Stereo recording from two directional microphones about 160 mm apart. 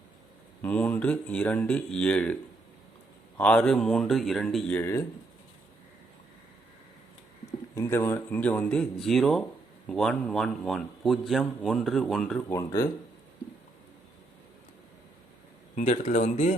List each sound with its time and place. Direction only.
0.6 s a man's voice: 10° left (ahead or behind)
7.8 s a man's voice: 15° left (ahead or behind)
12.5 s speech: 20° left (ahead or behind)
15.7 s speech: 50° left (ahead or behind)